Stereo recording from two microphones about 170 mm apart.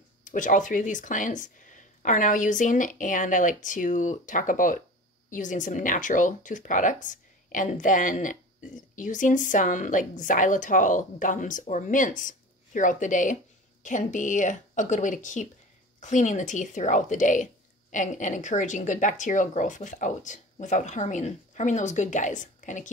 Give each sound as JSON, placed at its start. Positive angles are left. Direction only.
{"t": 0.2, "sound": "a woman's voice", "side_deg": 50}